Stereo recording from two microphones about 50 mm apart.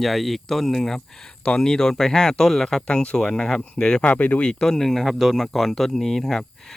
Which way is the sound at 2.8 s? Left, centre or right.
Centre.